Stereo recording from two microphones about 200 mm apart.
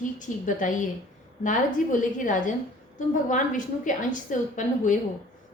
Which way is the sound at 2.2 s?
40° left (ahead or behind).